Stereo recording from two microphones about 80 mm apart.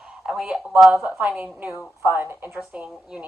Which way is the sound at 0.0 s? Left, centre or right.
Centre.